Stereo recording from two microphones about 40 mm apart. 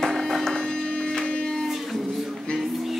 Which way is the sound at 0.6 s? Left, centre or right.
Centre.